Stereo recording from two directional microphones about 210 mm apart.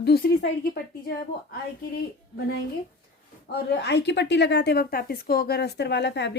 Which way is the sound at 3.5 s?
55° left (ahead or behind).